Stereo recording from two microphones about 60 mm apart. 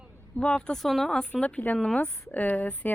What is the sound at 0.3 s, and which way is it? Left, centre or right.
Speech, centre.